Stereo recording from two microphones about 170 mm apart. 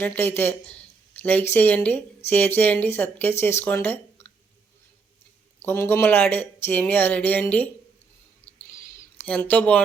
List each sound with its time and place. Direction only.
0.0 s speech: 15° left (ahead or behind)
5.6 s speech: 15° left (ahead or behind)
9.2 s speech: 10° left (ahead or behind)